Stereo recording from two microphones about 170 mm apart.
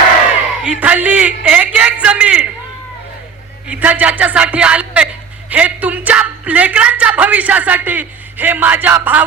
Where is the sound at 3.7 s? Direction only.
10° right (ahead or behind).